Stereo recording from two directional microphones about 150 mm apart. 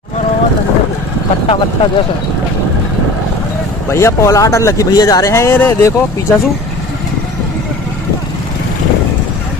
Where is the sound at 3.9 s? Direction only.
20° left (ahead or behind).